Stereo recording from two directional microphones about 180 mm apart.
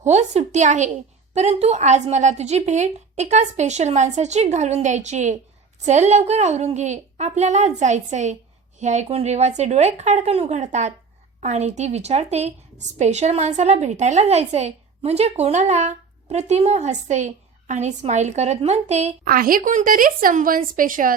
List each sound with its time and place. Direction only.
0.0 s a woman's voice: 40° right (ahead or behind)
19.3 s a woman's voice: 50° right (ahead or behind)